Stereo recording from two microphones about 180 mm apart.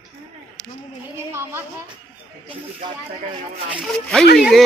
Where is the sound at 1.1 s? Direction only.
15° right (ahead or behind).